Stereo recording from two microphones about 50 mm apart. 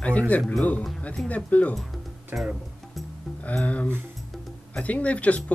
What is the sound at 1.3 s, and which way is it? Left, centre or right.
Speech, left.